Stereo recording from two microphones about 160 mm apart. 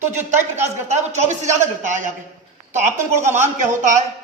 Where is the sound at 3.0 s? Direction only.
15° right (ahead or behind).